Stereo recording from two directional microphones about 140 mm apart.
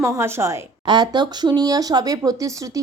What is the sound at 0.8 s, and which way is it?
A woman's voice, 30° right (ahead or behind).